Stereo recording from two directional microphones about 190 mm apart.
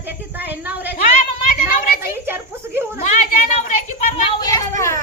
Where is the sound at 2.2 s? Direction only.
10° right (ahead or behind).